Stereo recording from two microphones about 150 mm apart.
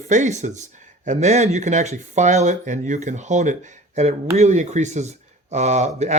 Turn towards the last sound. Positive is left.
turn(degrees=-50)  # may be behind; listen again after turning